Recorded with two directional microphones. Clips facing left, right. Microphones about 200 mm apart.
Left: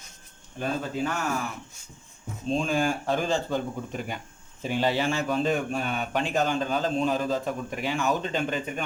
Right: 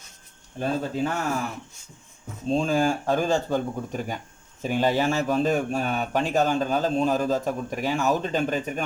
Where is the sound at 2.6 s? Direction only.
40° right (ahead or behind).